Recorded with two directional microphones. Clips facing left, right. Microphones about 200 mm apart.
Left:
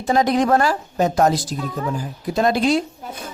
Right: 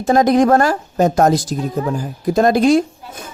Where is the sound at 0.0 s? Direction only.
45° right (ahead or behind).